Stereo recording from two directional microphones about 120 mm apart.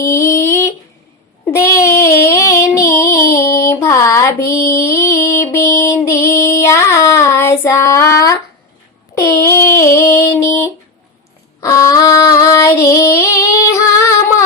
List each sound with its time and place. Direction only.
0.0 s a sound: 25° left (ahead or behind)
1.5 s child singing: 25° left (ahead or behind)
11.6 s female singing: 25° left (ahead or behind)